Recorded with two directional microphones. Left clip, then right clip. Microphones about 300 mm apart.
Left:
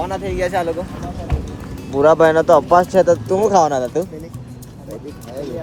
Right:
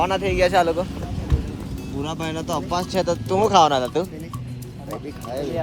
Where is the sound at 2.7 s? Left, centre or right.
Centre.